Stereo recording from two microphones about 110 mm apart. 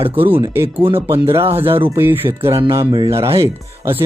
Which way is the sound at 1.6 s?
55° right (ahead or behind).